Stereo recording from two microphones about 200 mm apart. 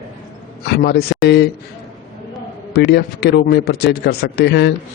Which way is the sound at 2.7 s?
55° left (ahead or behind).